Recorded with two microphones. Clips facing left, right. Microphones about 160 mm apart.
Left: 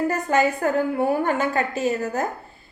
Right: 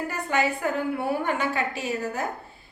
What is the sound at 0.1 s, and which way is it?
A woman's voice, 45° left (ahead or behind).